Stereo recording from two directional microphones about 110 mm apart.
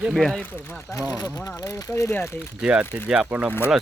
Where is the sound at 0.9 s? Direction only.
30° left (ahead or behind).